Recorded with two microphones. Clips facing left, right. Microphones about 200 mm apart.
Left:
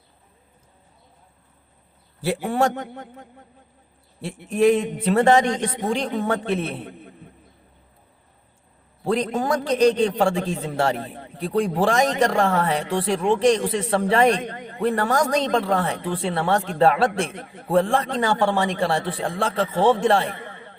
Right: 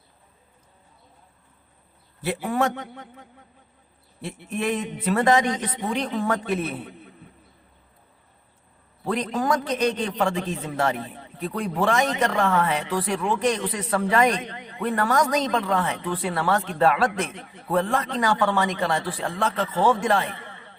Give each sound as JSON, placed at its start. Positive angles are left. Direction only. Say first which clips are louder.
{"t": 2.5, "sound": "speech", "louder": "left 2 dB", "side_deg": 30}
{"t": 2.7, "sound": "a man's voice", "louder": "left 4 dB", "side_deg": 50}
{"t": 4.5, "sound": "speech", "louder": "left 9 dB", "side_deg": 35}
{"t": 9.0, "sound": "speech", "louder": "left 2 dB", "side_deg": 30}
{"t": 11.0, "sound": "speech", "louder": "left 2 dB", "side_deg": 50}
{"t": 11.3, "sound": "speech", "louder": "left 5 dB", "side_deg": 30}
{"t": 14.4, "sound": "a man's voice", "louder": "left 5 dB", "side_deg": 50}
{"t": 14.8, "sound": "speech", "louder": "left 2 dB", "side_deg": 35}
{"t": 17.3, "sound": "a man's voice", "louder": "left 4 dB", "side_deg": 50}
{"t": 17.7, "sound": "speech", "louder": "left 4 dB", "side_deg": 30}
{"t": 20.3, "sound": "a sound", "louder": "left 4 dB", "side_deg": 50}